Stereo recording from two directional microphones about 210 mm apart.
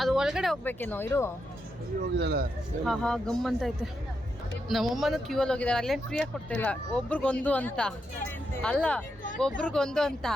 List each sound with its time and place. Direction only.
0.0 s speech: centre (ahead or behind)
2.1 s speech: 50° right (ahead or behind)
2.8 s speech: centre (ahead or behind)
4.7 s speech: centre (ahead or behind)